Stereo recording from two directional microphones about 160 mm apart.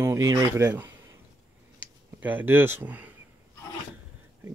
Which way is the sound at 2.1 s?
10° right (ahead or behind).